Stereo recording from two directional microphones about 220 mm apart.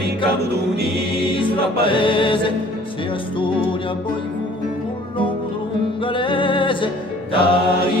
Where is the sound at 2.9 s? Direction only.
25° left (ahead or behind).